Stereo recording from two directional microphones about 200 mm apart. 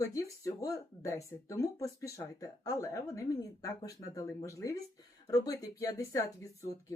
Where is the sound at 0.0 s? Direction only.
15° left (ahead or behind).